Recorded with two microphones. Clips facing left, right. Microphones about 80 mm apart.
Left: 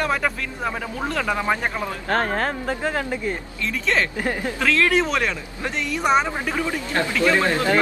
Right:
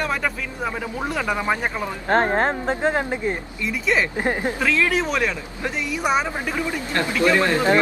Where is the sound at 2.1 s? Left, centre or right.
Right.